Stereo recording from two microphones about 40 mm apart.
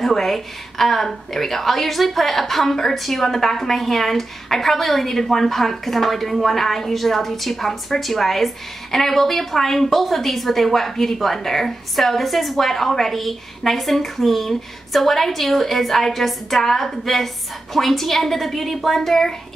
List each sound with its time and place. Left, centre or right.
0.0 s a woman's voice: centre